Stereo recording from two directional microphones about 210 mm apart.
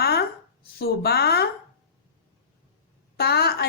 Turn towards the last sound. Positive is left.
turn(degrees=50)  # may be behind; listen again after turning